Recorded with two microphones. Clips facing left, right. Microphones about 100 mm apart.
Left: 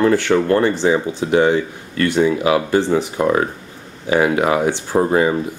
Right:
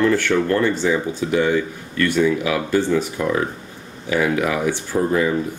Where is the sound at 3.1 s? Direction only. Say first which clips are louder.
Left 4 dB; 40° left (ahead or behind).